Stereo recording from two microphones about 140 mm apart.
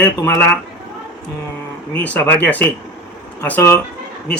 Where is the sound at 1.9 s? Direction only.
10° left (ahead or behind).